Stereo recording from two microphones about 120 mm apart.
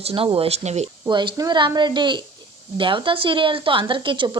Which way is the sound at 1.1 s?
35° right (ahead or behind).